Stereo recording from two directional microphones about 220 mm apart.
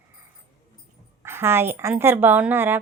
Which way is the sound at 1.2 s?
10° right (ahead or behind).